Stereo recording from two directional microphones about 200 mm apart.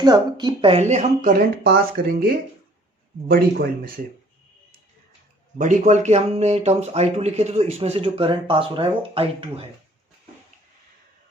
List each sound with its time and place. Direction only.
0.0 s speech: 20° right (ahead or behind); by 1.8 s 45° right (ahead or behind)
3.2 s speech: 45° right (ahead or behind)
5.5 s speech: 40° right (ahead or behind)